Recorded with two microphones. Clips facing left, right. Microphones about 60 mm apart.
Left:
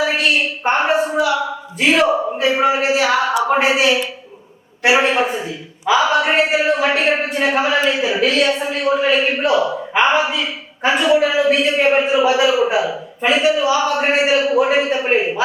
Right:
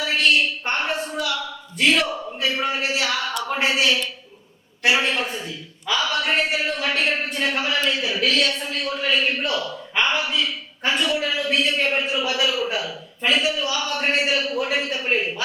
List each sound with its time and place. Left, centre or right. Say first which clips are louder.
0.0 s a woman's voice: left 3 dB; centre